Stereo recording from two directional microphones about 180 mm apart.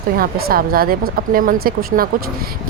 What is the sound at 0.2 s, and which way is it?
Speech, 55° right (ahead or behind).